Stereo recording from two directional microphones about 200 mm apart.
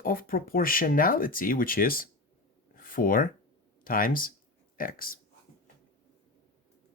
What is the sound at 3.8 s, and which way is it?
Speech, 45° left (ahead or behind).